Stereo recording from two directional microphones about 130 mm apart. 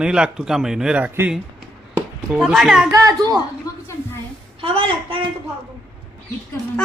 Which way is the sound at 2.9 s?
30° right (ahead or behind).